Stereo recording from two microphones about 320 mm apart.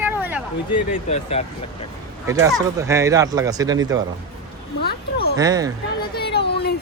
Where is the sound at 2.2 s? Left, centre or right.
Centre.